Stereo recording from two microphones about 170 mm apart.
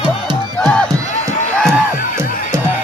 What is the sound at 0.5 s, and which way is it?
Crowd, 5° left (ahead or behind).